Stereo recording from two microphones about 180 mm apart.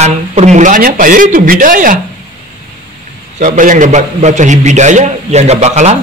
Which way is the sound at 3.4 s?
45° right (ahead or behind).